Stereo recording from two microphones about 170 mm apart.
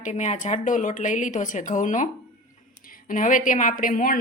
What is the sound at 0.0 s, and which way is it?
Speech, 45° left (ahead or behind).